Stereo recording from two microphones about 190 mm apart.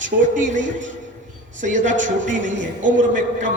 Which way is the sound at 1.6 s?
40° right (ahead or behind).